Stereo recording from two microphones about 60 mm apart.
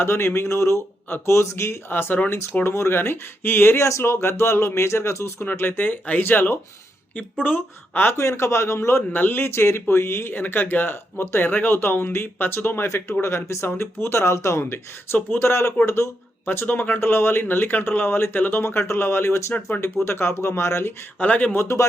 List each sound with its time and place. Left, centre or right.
0.0 s speech: left
1.9 s speech: left
2.6 s speech: left
3.8 s speech: left
5.5 s speech: left
8.1 s speech: left
9.0 s speech: left
16.6 s speech: left
17.0 s speech: left
18.6 s speech: left
21.2 s speech: left
21.5 s speech: left